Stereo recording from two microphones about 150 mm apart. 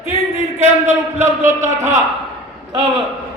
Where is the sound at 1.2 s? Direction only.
15° right (ahead or behind).